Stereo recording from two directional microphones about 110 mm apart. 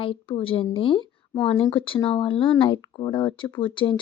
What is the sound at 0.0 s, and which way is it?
Speech, 55° left (ahead or behind).